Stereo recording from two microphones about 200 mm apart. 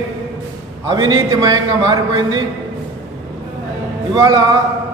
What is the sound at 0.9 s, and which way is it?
A man's voice, 20° right (ahead or behind).